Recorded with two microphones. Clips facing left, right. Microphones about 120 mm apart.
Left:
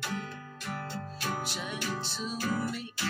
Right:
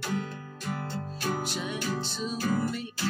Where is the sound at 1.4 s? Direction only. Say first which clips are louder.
Right 4 dB; 5° left (ahead or behind).